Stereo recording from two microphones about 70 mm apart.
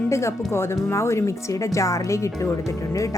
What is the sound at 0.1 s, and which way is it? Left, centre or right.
A woman's voice, left.